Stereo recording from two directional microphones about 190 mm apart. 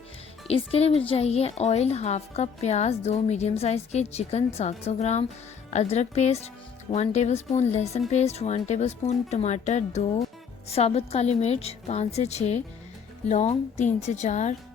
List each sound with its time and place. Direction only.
0.4 s speech: 30° left (ahead or behind)